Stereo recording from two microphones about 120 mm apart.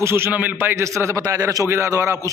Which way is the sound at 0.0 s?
20° right (ahead or behind).